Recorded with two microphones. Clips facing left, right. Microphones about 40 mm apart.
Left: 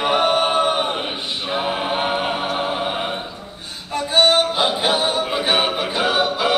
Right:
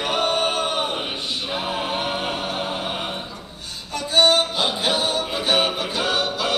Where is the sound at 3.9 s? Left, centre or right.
Left.